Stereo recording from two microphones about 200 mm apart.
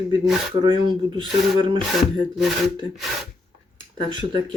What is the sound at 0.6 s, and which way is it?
Speech, 25° right (ahead or behind).